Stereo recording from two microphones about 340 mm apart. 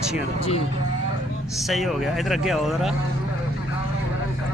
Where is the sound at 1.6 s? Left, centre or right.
Centre.